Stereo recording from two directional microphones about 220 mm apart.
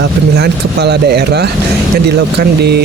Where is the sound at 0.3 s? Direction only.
50° right (ahead or behind).